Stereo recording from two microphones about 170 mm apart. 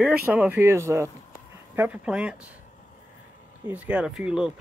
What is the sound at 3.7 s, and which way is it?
Speech, 10° right (ahead or behind).